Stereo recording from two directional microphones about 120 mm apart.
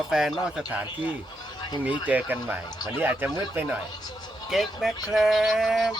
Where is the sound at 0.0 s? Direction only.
Centre (ahead or behind).